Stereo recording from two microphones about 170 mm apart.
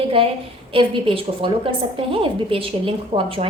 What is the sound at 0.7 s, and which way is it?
A woman's voice, 30° right (ahead or behind).